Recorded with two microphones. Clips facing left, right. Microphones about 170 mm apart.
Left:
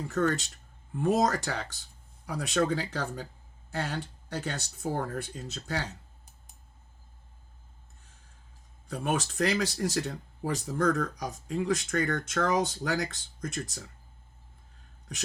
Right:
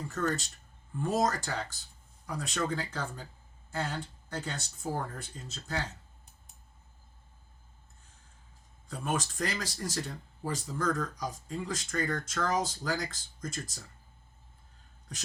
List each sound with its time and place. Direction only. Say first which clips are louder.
0.9 s speech: left 4 dB; 70° left (ahead or behind)
8.9 s speech: left 3 dB; 65° left (ahead or behind)